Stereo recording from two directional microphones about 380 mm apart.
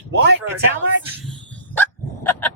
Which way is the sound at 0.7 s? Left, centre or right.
Centre.